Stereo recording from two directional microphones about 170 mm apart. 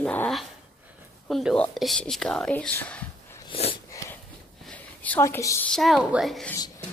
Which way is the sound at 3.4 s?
35° left (ahead or behind).